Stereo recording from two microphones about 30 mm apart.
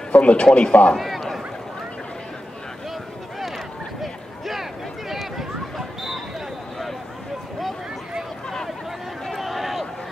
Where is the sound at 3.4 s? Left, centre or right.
Centre.